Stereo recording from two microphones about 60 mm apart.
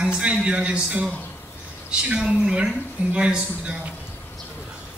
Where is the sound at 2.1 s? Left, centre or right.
Centre.